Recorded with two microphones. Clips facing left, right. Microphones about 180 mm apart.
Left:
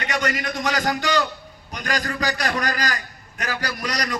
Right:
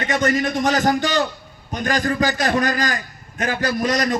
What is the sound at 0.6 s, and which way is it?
Speech, 45° right (ahead or behind).